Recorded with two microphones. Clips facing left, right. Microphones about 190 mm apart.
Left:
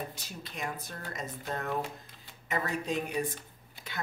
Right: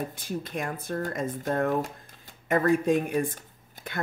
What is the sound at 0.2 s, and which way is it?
Speech, 50° right (ahead or behind).